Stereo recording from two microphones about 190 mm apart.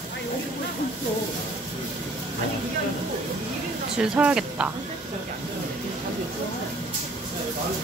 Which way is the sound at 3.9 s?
5° right (ahead or behind).